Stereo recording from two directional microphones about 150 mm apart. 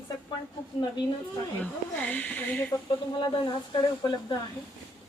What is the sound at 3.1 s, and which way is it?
Speech, 30° left (ahead or behind).